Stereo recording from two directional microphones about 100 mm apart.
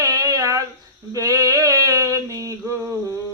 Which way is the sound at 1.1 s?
35° right (ahead or behind).